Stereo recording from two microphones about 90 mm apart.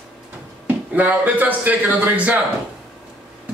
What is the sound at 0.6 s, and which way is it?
A man's voice, 20° right (ahead or behind).